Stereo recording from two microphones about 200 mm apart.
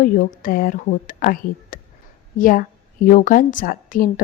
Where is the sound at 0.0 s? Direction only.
45° left (ahead or behind).